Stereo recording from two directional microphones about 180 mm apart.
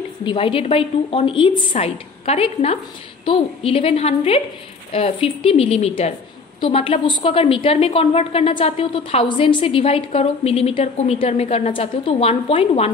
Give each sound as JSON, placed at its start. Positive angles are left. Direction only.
{"t": 0.2, "sound": "a woman's voice", "side_deg": 30}